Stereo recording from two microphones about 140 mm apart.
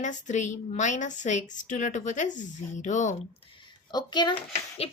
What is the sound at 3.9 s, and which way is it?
Speech, 30° left (ahead or behind).